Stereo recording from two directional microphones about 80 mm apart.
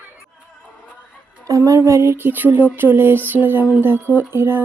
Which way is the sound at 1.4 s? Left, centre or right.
Right.